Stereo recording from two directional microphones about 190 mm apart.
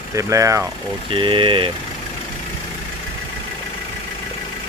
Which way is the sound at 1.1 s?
25° right (ahead or behind).